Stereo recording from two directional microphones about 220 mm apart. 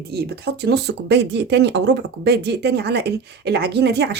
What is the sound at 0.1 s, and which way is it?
Speech, 45° right (ahead or behind).